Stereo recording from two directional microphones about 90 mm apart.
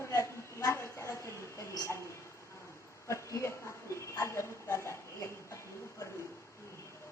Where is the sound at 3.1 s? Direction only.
30° left (ahead or behind).